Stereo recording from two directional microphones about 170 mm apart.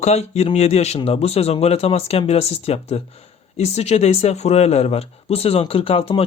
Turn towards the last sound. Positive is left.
turn(degrees=35)  # may be behind; listen again after turning